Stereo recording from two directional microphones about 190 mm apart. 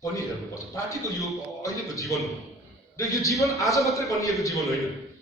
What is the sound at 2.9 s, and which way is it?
Speech, 15° left (ahead or behind).